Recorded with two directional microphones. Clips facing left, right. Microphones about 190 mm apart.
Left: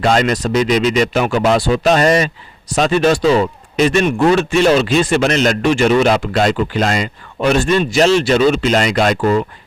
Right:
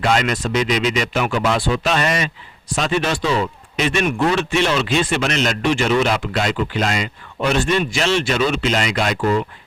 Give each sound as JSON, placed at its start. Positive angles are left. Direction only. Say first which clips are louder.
{"t": 0.0, "sound": "a man's voice", "louder": "left 4 dB", "side_deg": 35}